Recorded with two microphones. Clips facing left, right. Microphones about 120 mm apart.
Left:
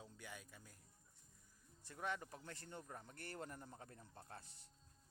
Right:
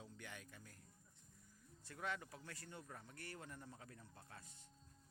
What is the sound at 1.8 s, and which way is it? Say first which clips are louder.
Speech: left 1 dB; 15° left (ahead or behind).